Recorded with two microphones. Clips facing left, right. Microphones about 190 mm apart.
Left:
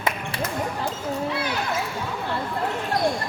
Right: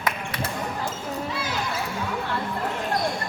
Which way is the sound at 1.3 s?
65° left (ahead or behind).